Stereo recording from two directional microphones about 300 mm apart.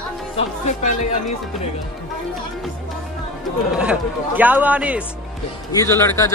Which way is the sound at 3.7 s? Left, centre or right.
Centre.